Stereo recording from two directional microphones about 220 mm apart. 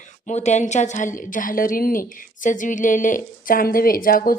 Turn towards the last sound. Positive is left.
turn(degrees=40)  # may be behind; listen again after turning